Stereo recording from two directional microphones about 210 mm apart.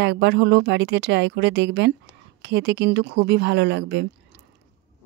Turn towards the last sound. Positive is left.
turn(degrees=-55)  # may be behind; listen again after turning